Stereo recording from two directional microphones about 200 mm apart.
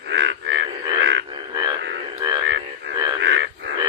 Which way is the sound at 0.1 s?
65° right (ahead or behind).